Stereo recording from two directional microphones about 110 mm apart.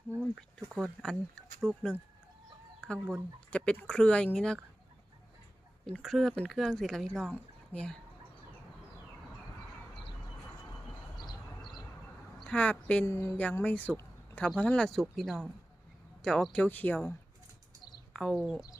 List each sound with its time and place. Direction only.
0.7 s speech: 5° left (ahead or behind)
5.8 s speech: 5° left (ahead or behind)
11.2 s train: 45° left (ahead or behind)
12.5 s speech: 10° left (ahead or behind)
13.1 s speech: 25° left (ahead or behind)
18.1 s speech: 5° left (ahead or behind)